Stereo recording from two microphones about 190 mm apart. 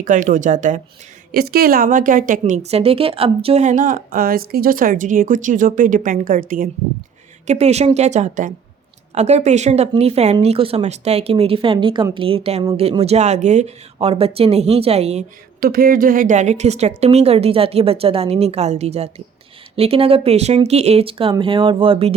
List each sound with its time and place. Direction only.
0.0 s speech: 45° right (ahead or behind)
1.3 s a woman's voice: 55° right (ahead or behind)
7.4 s speech: 35° right (ahead or behind)
15.6 s speech: 50° right (ahead or behind); by 22.1 s 30° right (ahead or behind)